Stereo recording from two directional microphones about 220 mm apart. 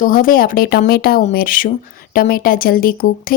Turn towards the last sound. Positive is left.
turn(degrees=40)  # may be behind; listen again after turning